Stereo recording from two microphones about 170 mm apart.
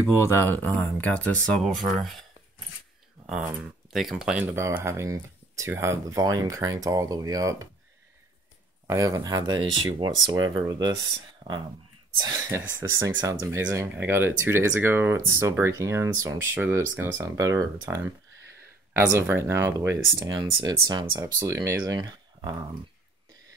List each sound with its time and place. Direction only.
0.2 s speech: 15° left (ahead or behind)
3.3 s speech: 5° right (ahead or behind); by 7.6 s 20° right (ahead or behind)
8.8 s speech: 20° right (ahead or behind)
12.2 s speech: 20° right (ahead or behind)